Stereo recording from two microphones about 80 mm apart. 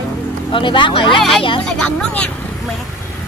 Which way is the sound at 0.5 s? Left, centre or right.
Left.